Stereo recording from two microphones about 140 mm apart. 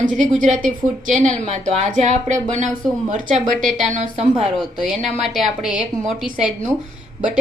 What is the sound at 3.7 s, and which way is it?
Speech, 60° right (ahead or behind).